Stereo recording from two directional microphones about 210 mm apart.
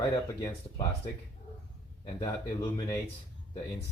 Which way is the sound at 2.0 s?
25° left (ahead or behind).